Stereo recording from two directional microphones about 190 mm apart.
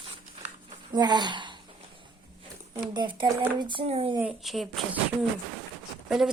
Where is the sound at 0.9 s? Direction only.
20° right (ahead or behind).